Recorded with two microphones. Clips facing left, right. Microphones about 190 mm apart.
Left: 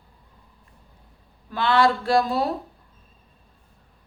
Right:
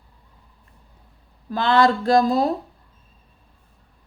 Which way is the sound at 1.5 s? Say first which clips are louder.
Right 2 dB; 40° right (ahead or behind).